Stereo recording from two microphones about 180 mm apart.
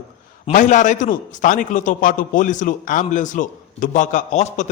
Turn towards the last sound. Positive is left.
turn(degrees=40)  # may be behind; listen again after turning